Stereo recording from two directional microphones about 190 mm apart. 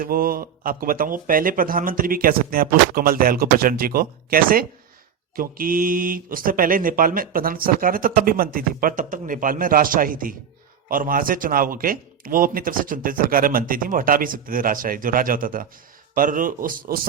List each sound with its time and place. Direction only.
0.0 s speech: 50° right (ahead or behind)